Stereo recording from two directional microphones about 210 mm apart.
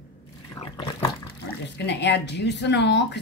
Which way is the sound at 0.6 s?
15° left (ahead or behind).